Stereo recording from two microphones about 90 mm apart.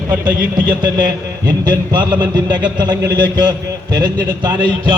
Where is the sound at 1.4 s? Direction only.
60° right (ahead or behind).